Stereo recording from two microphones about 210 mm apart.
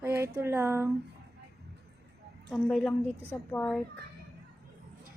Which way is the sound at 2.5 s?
Centre (ahead or behind).